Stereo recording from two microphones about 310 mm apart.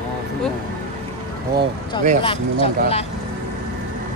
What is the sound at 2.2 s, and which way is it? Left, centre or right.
Speech, centre.